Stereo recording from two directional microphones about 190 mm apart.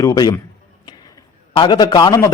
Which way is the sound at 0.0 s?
20° left (ahead or behind).